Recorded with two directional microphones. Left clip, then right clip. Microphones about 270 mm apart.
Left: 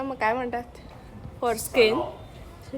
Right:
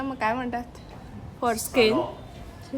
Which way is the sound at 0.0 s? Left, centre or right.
Centre.